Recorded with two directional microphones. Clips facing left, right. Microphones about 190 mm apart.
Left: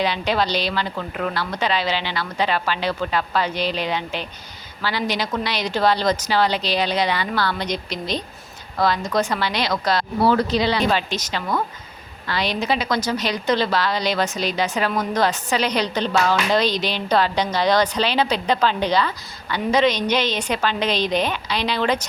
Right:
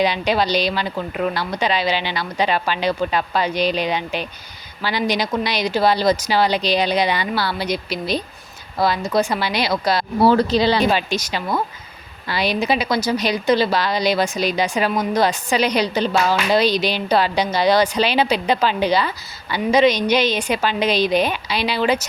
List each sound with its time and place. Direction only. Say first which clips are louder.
0.0 s a woman's voice: right 3 dB; 15° right (ahead or behind)
10.2 s speech: right 4 dB; 30° right (ahead or behind)
10.8 s a woman's voice: right 2 dB; 10° right (ahead or behind)